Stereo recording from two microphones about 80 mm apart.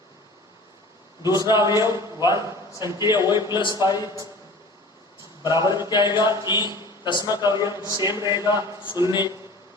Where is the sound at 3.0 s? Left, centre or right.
Left.